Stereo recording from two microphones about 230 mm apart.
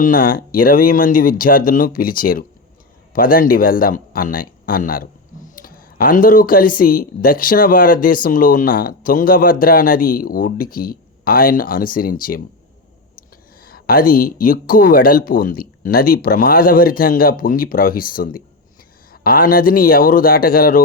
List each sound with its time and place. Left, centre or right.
0.0 s speech: left
13.6 s speech: left